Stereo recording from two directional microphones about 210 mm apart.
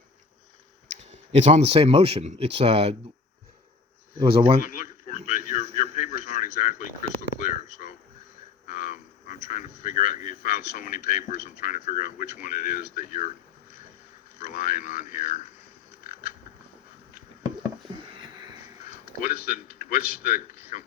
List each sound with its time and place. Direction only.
1.1 s speech: 35° right (ahead or behind)
4.2 s speech: 25° right (ahead or behind)
4.6 s a sound: 40° left (ahead or behind)
8.6 s speech: 40° left (ahead or behind)
14.3 s speech: 40° left (ahead or behind)
18.9 s a sound: 40° left (ahead or behind)
19.5 s speech: 40° left (ahead or behind)